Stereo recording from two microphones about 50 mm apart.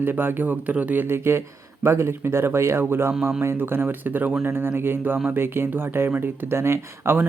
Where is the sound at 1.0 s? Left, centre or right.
Right.